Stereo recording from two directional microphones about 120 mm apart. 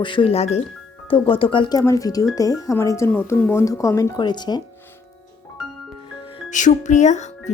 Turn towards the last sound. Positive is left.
turn(degrees=75)  # may be behind; listen again after turning